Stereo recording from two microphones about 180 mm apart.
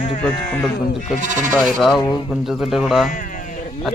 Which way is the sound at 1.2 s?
45° right (ahead or behind).